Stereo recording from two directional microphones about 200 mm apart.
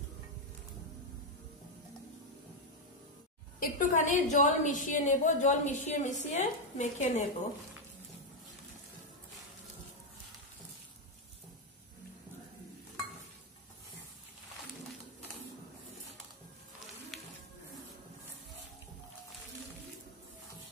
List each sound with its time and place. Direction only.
3.5 s a woman's voice: 40° left (ahead or behind)
17.1 s music: centre (ahead or behind)